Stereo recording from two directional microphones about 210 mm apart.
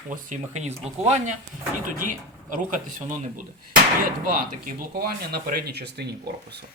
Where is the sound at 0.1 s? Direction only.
35° right (ahead or behind).